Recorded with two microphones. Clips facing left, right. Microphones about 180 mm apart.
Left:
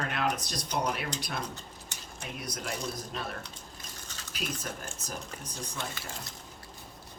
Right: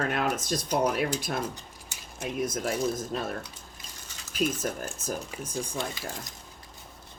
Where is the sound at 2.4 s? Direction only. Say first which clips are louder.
Right 10 dB; 50° right (ahead or behind).